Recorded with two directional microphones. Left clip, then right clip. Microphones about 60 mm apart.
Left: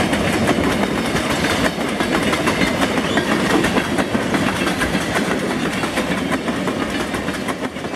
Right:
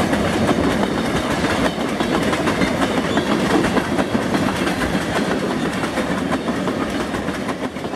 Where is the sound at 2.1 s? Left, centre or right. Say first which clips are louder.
Left 1 dB; left.